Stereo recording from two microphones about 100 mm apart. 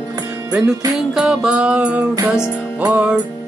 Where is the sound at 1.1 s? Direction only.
5° right (ahead or behind).